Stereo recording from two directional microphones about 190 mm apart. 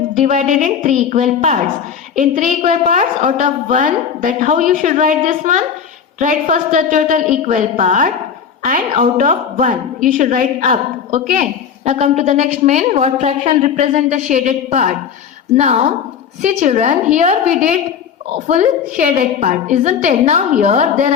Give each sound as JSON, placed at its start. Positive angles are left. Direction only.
{"t": 0.2, "sound": "a woman's voice", "side_deg": -40}